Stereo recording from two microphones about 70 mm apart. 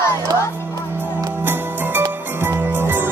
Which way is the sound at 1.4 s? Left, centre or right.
Right.